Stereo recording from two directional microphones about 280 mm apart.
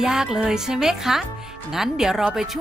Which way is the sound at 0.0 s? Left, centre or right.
Centre.